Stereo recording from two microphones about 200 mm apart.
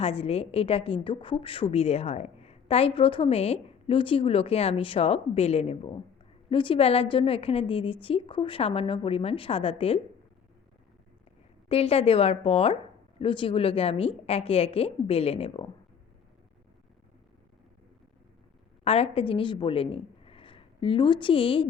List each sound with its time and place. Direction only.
0.0 s a woman's voice: 30° left (ahead or behind)
11.7 s a woman's voice: 30° left (ahead or behind)
18.9 s a woman's voice: 30° left (ahead or behind)